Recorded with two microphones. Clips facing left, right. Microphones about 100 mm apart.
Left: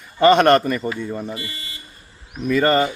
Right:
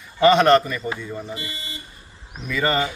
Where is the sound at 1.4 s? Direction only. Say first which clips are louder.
Even; 20° right (ahead or behind).